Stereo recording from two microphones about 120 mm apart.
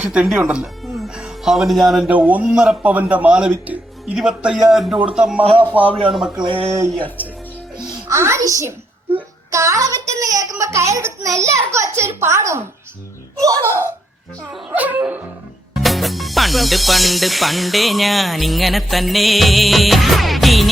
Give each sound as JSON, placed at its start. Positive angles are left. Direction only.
{"t": 0.0, "sound": "speech", "side_deg": -10}
{"t": 2.0, "sound": "a man's voice", "side_deg": -15}
{"t": 5.4, "sound": "speech", "side_deg": -50}
{"t": 6.1, "sound": "speech", "side_deg": -5}
{"t": 6.4, "sound": "speech", "side_deg": -50}
{"t": 7.8, "sound": "music", "side_deg": -35}
{"t": 8.1, "sound": "speech", "side_deg": -25}
{"t": 13.7, "sound": "speech", "side_deg": 20}
{"t": 14.7, "sound": "a man's voice", "side_deg": -10}
{"t": 15.7, "sound": "speech", "side_deg": 0}